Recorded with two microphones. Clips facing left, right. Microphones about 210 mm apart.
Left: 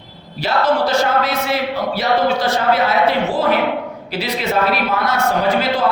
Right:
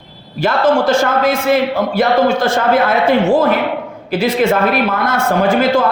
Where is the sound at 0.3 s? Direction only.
50° right (ahead or behind).